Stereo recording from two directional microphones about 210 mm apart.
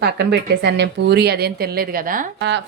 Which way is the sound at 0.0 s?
50° right (ahead or behind).